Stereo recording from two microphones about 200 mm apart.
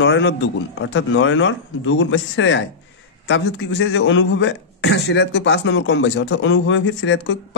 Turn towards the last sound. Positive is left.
turn(degrees=70)  # may be behind; listen again after turning